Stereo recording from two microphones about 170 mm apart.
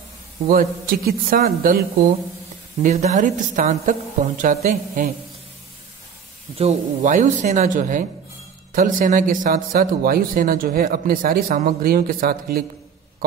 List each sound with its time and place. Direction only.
0.5 s speech: 60° right (ahead or behind)
2.8 s speech: 45° right (ahead or behind)
6.5 s speech: 35° right (ahead or behind); by 12.6 s 60° right (ahead or behind)